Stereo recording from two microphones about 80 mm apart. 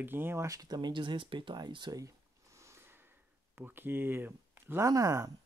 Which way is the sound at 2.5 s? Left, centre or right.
Right.